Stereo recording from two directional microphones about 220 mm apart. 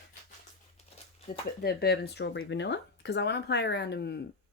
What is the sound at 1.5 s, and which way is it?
Speech, 45° left (ahead or behind).